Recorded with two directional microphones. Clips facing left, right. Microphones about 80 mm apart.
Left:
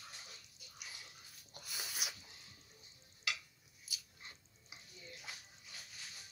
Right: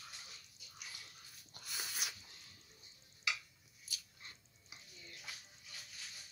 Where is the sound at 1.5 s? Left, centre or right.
Centre.